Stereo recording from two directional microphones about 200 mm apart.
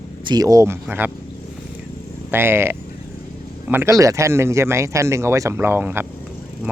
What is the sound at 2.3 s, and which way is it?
Speech, 10° right (ahead or behind).